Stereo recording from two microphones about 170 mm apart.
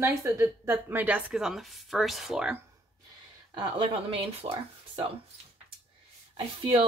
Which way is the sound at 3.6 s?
30° right (ahead or behind).